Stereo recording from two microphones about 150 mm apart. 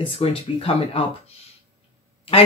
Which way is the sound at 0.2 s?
40° left (ahead or behind).